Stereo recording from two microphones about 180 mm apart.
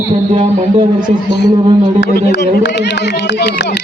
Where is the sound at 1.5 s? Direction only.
25° right (ahead or behind).